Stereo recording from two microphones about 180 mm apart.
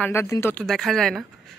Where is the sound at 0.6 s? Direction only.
Centre (ahead or behind).